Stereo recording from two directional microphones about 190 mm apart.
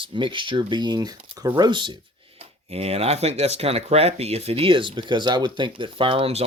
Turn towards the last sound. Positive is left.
turn(degrees=-30)  # may be behind; listen again after turning